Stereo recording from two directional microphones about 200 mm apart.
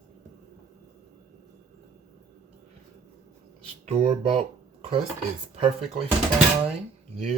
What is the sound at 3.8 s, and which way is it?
Speech, 30° right (ahead or behind).